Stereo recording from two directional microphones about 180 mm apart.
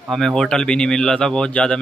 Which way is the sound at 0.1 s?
Centre (ahead or behind).